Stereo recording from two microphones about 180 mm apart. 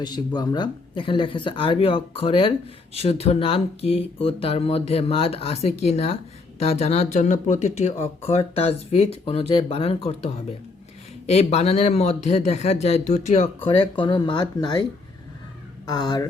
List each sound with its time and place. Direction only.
0.3 s speech: 25° left (ahead or behind)
15.9 s speech: 25° left (ahead or behind)